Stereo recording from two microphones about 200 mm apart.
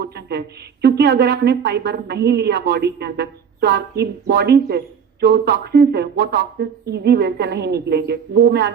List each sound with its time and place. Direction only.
0.0 s a woman's voice: 55° right (ahead or behind)